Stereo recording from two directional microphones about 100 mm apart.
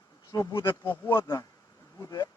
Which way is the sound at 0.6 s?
20° left (ahead or behind).